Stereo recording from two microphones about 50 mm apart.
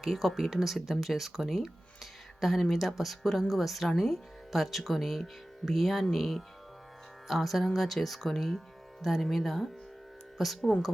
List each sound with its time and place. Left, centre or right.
0.0 s speech: centre